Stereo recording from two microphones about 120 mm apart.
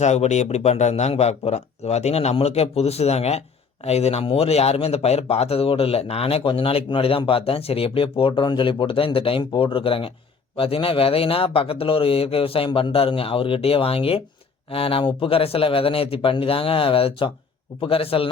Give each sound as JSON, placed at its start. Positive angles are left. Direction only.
{"t": 0.0, "sound": "speech", "side_deg": 70}